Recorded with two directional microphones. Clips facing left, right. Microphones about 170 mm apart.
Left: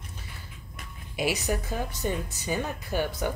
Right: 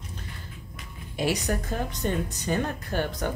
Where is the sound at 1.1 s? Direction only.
10° left (ahead or behind).